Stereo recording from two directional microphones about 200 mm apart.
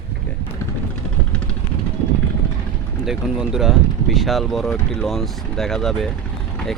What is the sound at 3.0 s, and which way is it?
Speech, centre (ahead or behind).